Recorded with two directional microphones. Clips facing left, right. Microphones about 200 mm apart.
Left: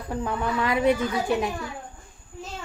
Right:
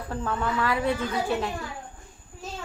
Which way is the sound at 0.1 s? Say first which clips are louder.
Left 2 dB; 15° left (ahead or behind).